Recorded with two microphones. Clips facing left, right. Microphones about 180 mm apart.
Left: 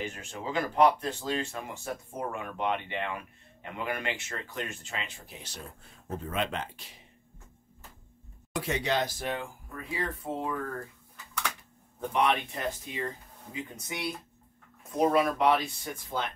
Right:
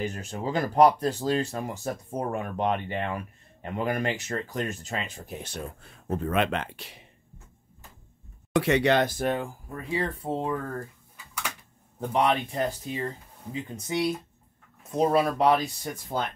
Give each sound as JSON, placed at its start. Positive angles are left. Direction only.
{"t": 0.0, "sound": "speech", "side_deg": -40}
{"t": 8.5, "sound": "speech", "side_deg": -70}
{"t": 12.1, "sound": "speech", "side_deg": -30}
{"t": 15.0, "sound": "speech", "side_deg": -30}